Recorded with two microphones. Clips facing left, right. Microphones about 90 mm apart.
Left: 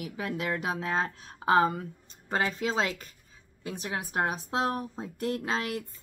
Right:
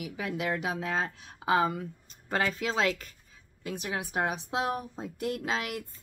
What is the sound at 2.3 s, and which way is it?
Speech, 25° left (ahead or behind).